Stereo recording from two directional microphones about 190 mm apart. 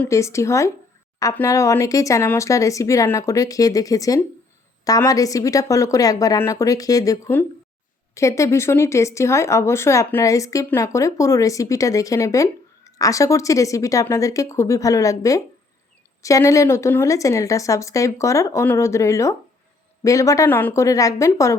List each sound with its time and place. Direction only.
0.0 s speech: 15° left (ahead or behind)